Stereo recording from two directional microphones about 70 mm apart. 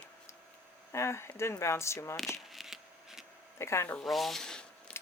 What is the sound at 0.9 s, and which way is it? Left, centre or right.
Speech, left.